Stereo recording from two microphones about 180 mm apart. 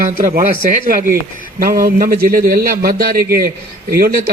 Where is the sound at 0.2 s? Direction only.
45° right (ahead or behind).